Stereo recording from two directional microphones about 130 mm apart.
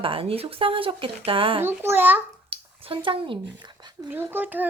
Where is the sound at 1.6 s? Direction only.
15° right (ahead or behind).